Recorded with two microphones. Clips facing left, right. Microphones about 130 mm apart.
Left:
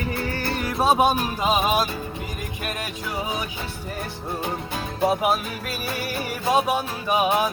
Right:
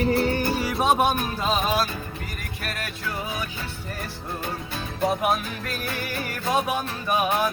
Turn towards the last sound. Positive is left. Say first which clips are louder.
# left 2 dB
turn(degrees=10)  # may be behind; listen again after turning